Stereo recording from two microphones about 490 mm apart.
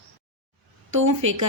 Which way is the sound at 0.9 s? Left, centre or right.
Right.